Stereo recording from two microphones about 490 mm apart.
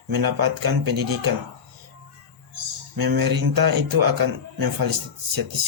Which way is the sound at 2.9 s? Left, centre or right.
Right.